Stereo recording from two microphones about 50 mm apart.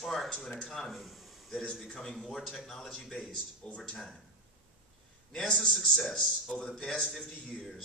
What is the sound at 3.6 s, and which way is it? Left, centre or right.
Speech, left.